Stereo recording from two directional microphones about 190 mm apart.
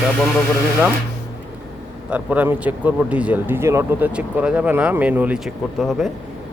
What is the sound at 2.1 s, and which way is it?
Speech, 10° right (ahead or behind).